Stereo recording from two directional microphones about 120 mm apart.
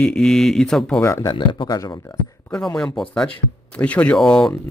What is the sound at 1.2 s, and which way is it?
Speech, 40° left (ahead or behind).